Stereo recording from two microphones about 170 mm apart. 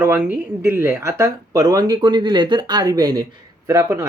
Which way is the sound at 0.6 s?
15° right (ahead or behind).